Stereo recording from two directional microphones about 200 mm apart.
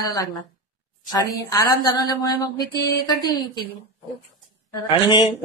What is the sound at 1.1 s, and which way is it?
A woman's voice, 20° left (ahead or behind).